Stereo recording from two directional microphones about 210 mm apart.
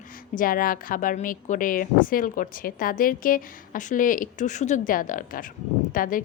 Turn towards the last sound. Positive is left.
turn(degrees=40)  # may be behind; listen again after turning